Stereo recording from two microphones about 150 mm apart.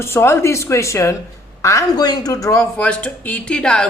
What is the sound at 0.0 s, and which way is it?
Speech, 15° left (ahead or behind).